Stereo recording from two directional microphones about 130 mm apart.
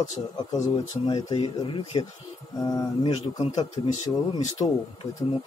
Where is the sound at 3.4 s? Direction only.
60° left (ahead or behind).